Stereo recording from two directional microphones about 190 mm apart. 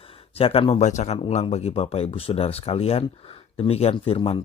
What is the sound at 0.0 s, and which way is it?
Speech, 30° left (ahead or behind).